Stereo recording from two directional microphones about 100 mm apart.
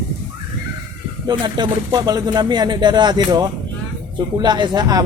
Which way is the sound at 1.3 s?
50° right (ahead or behind).